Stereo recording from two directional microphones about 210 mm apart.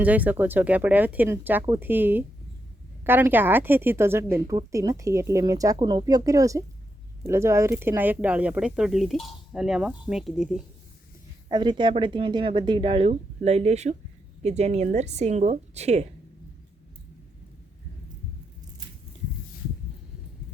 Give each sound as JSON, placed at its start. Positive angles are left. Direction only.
{"t": 0.0, "sound": "a woman's voice", "side_deg": -5}
{"t": 11.4, "sound": "a woman's voice", "side_deg": -20}